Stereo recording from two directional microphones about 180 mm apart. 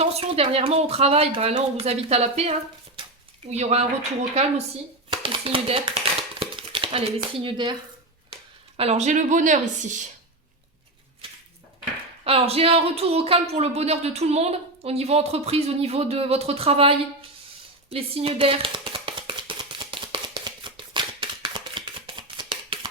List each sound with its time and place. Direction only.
0.0 s speech: 35° right (ahead or behind)
5.1 s speech: 30° right (ahead or behind)
6.4 s a sound: 30° right (ahead or behind)
8.8 s a woman's voice: 40° right (ahead or behind)
12.2 s speech: 35° right (ahead or behind)
17.9 s a sound: 30° right (ahead or behind)